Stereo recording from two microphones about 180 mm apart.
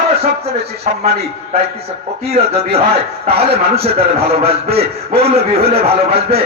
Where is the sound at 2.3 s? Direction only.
35° right (ahead or behind).